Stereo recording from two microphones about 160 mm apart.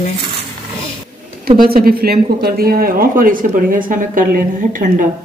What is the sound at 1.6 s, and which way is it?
Speech, 70° right (ahead or behind).